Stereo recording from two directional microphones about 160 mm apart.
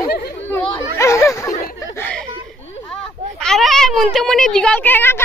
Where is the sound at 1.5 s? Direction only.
55° left (ahead or behind).